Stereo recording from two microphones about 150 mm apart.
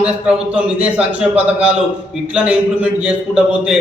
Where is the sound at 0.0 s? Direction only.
5° right (ahead or behind).